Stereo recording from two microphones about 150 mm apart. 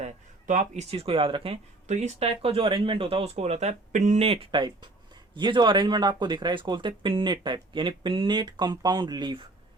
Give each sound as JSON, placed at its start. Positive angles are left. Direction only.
{"t": 0.0, "sound": "speech", "side_deg": -55}
{"t": 1.9, "sound": "speech", "side_deg": -50}